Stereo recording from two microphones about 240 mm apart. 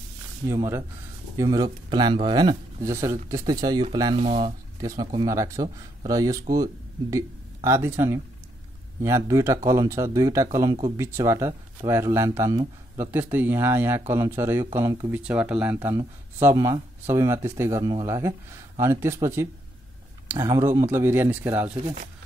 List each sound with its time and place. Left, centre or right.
0.5 s speech: centre; by 4.6 s right
4.8 s speech: centre